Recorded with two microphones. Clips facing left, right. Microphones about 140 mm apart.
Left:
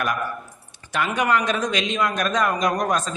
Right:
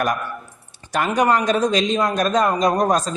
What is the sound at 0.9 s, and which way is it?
A man's voice, 40° right (ahead or behind).